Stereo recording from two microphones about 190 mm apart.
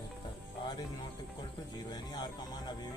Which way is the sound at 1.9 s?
20° left (ahead or behind).